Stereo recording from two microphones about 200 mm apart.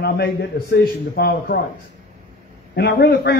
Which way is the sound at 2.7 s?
55° left (ahead or behind).